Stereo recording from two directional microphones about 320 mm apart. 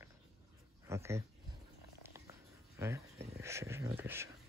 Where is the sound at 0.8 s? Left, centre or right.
Centre.